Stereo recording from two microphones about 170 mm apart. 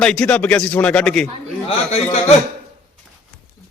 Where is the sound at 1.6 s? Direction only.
40° left (ahead or behind).